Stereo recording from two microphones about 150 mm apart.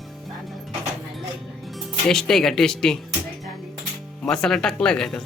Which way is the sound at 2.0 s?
5° left (ahead or behind).